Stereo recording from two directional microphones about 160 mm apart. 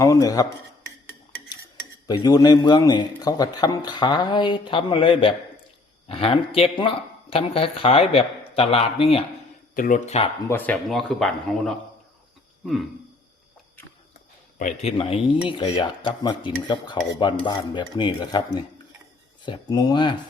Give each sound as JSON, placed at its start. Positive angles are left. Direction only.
{"t": 0.0, "sound": "a man's voice", "side_deg": 20}
{"t": 2.0, "sound": "a man's voice", "side_deg": 25}
{"t": 9.7, "sound": "speech", "side_deg": 60}
{"t": 10.5, "sound": "speech", "side_deg": 10}
{"t": 14.6, "sound": "a man's voice", "side_deg": 40}